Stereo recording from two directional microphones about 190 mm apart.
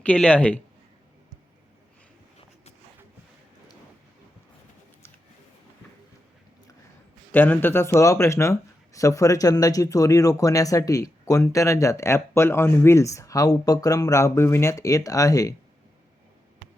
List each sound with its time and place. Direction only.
0.0 s speech: 5° left (ahead or behind)
7.3 s speech: 10° left (ahead or behind)